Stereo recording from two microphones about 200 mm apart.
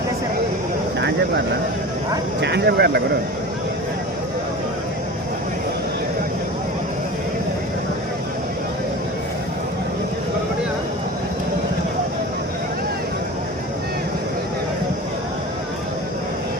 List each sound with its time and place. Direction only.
2.4 s speech: 55° right (ahead or behind)